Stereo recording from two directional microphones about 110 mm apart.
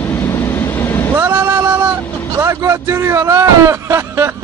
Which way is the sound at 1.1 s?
20° right (ahead or behind).